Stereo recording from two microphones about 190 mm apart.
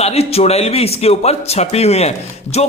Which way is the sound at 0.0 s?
35° left (ahead or behind).